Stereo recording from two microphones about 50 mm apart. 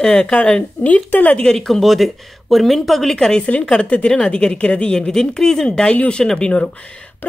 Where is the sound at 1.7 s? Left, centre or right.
Centre.